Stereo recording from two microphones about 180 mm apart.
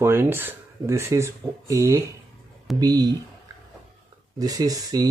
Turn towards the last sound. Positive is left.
turn(degrees=-20)  # may be behind; listen again after turning